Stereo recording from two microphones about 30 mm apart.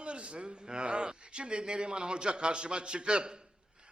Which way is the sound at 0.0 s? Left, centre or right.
Right.